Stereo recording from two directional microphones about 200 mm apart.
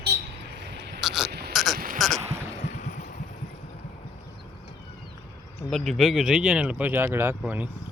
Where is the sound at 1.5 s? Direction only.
Centre (ahead or behind).